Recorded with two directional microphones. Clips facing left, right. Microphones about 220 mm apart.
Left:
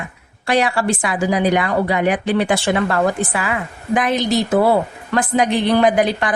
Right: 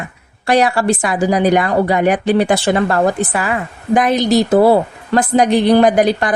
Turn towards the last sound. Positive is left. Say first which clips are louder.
# right 3 dB
turn(degrees=-40)  # may be behind; listen again after turning